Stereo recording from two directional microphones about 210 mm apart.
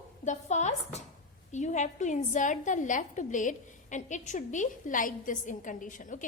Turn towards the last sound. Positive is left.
turn(degrees=40)  # may be behind; listen again after turning